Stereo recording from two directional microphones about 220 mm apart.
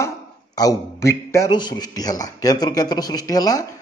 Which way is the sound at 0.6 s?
15° left (ahead or behind).